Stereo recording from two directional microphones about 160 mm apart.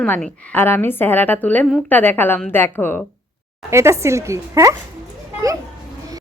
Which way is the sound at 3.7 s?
15° right (ahead or behind).